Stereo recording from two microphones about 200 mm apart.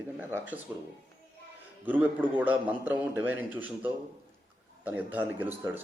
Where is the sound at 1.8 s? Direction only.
10° right (ahead or behind).